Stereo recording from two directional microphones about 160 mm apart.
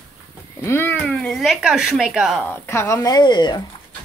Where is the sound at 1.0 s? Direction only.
Centre (ahead or behind).